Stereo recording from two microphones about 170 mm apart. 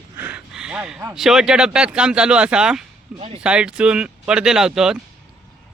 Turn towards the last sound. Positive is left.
turn(degrees=-5)  # may be behind; listen again after turning